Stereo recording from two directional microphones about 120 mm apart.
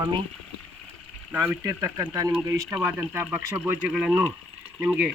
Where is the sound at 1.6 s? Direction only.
25° right (ahead or behind).